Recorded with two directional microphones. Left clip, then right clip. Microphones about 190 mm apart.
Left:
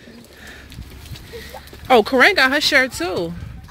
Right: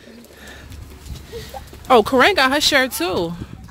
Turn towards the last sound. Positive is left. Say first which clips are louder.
# even
turn(degrees=-10)  # may be behind; listen again after turning